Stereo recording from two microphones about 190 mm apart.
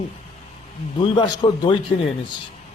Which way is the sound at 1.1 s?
20° left (ahead or behind).